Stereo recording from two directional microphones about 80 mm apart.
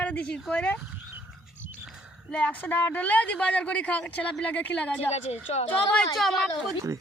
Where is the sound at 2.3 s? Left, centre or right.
Centre.